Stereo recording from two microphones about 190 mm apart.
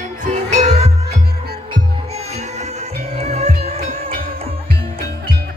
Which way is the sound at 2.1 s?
35° right (ahead or behind).